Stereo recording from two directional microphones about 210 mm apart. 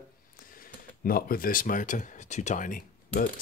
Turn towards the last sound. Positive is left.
turn(degrees=40)  # may be behind; listen again after turning